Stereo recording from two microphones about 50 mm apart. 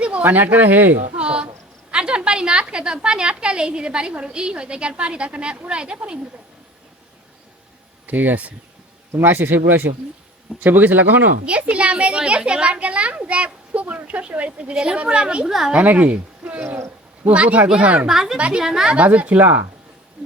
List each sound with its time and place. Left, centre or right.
0.0 s speech: right
1.1 s a sound: right
1.9 s a woman's voice: centre
8.0 s speech: right
11.4 s a woman's voice: right
15.4 s a woman's voice: centre
15.7 s a woman's voice: right
16.6 s speech: right
17.2 s a woman's voice: right
18.1 s a woman's voice: centre
18.3 s a woman's voice: right
18.6 s a woman's voice: centre
18.9 s speech: right
20.2 s a sound: right